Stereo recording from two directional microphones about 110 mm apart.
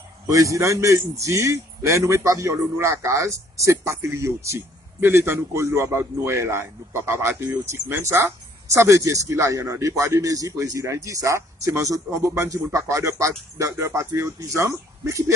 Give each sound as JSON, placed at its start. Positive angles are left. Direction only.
{"t": 0.3, "sound": "a man's voice", "side_deg": -30}